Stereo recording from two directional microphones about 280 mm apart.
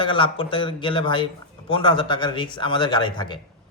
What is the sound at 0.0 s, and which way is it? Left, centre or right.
Speech, centre.